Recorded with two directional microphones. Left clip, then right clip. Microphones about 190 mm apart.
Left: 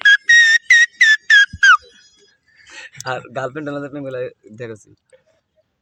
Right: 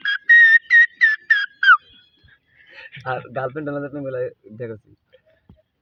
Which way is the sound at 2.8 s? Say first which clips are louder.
Left 2 dB; 30° left (ahead or behind).